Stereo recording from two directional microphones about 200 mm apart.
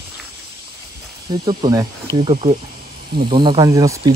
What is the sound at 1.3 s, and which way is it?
Speech, 20° right (ahead or behind).